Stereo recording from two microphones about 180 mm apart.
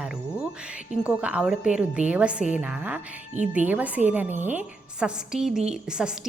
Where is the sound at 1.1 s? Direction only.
5° right (ahead or behind).